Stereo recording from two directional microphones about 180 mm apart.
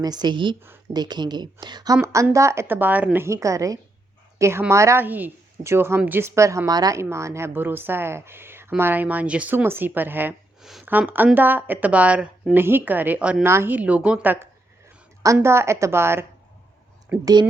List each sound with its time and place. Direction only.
0.0 s a woman's voice: 25° right (ahead or behind)